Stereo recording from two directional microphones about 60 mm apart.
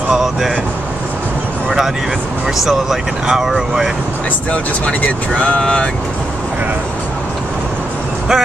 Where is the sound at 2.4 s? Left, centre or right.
Centre.